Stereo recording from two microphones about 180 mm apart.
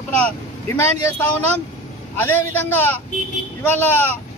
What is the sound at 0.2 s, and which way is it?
Vehicle, 10° left (ahead or behind).